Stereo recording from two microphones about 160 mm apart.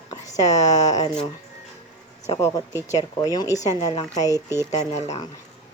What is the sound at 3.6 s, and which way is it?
Speech, 40° left (ahead or behind).